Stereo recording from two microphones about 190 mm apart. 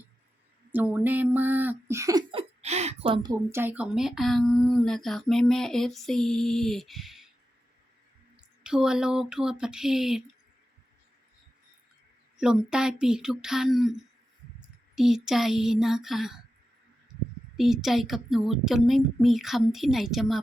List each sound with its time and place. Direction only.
0.7 s a sound: 10° right (ahead or behind)
2.6 s a woman's voice: 35° right (ahead or behind)
3.5 s speech: 10° right (ahead or behind)
8.4 s speech: 5° right (ahead or behind)
12.4 s speech: 5° right (ahead or behind)
14.9 s speech: centre (ahead or behind)
17.6 s speech: centre (ahead or behind)